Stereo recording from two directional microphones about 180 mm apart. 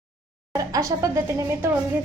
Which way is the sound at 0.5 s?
20° right (ahead or behind).